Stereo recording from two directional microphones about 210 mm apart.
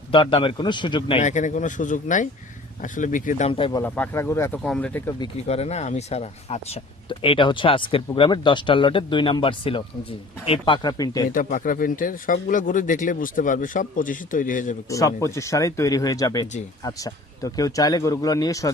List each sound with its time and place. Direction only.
0.1 s speech: 25° left (ahead or behind)
1.2 s speech: 35° left (ahead or behind); by 5.1 s 10° left (ahead or behind)
5.2 s speech: 30° left (ahead or behind)
11.3 s speech: 40° left (ahead or behind)
14.8 s speech: 15° left (ahead or behind)